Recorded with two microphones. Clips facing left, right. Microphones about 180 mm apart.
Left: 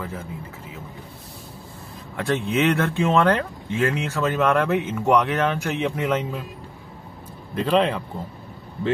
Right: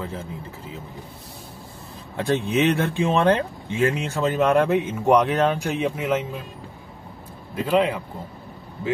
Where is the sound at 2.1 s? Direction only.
25° right (ahead or behind).